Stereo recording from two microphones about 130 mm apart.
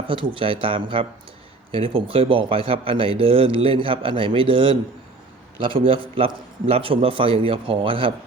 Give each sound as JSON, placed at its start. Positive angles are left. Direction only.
{"t": 0.1, "sound": "a man's voice", "side_deg": -40}